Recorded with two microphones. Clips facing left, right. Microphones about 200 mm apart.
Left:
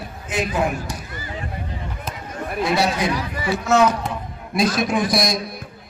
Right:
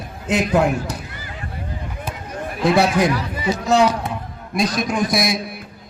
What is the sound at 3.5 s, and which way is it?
Speech, 35° right (ahead or behind).